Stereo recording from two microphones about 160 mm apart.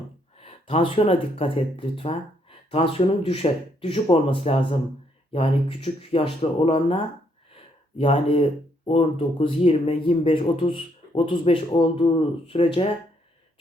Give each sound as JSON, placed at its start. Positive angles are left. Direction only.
{"t": 0.3, "sound": "speech", "side_deg": 40}
{"t": 7.5, "sound": "a sound", "side_deg": 35}
{"t": 8.9, "sound": "speech", "side_deg": 35}